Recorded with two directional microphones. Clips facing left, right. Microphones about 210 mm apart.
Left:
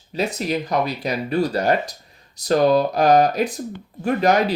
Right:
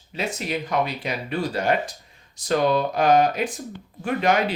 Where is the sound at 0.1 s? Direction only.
40° left (ahead or behind).